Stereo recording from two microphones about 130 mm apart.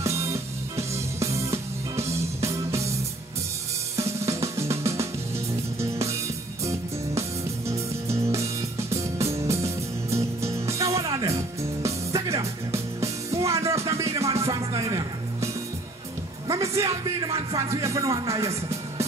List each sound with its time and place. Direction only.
0.0 s music: 25° right (ahead or behind)
4.3 s drum: 20° right (ahead or behind)
6.0 s music: 25° right (ahead or behind)
9.3 s music: 50° right (ahead or behind)
9.6 s music: 20° right (ahead or behind)
16.6 s music: 25° right (ahead or behind)